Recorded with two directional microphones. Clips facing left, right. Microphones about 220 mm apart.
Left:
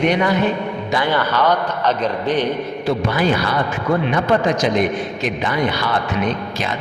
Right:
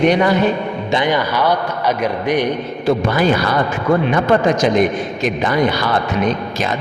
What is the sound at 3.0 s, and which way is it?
A man's voice, 45° right (ahead or behind).